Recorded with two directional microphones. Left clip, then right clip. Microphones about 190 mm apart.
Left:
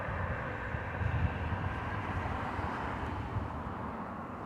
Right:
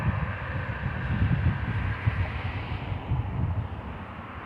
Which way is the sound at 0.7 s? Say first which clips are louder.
Right 4 dB; 65° left (ahead or behind).